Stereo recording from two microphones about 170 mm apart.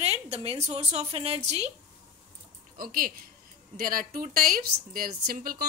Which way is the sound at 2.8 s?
60° right (ahead or behind).